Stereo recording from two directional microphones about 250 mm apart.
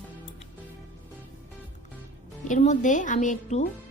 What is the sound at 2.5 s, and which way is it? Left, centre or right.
A woman's voice, left.